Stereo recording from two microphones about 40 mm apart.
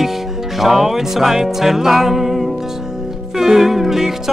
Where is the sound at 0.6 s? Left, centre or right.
Centre.